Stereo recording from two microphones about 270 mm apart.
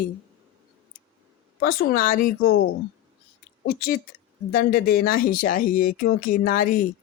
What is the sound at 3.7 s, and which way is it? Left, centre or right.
Speech, left.